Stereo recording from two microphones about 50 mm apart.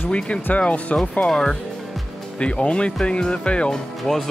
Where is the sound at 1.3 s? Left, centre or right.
Centre.